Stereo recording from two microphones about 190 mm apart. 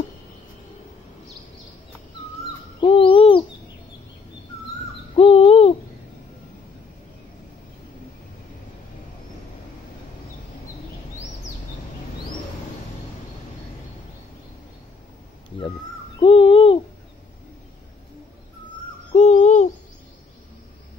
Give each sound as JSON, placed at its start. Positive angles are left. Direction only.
{"t": 2.8, "sound": "owl", "side_deg": 30}
{"t": 5.1, "sound": "owl", "side_deg": 30}
{"t": 16.2, "sound": "a sound", "side_deg": 30}
{"t": 19.1, "sound": "owl", "side_deg": 40}